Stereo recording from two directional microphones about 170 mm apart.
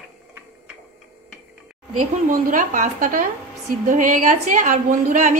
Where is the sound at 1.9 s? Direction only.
50° right (ahead or behind).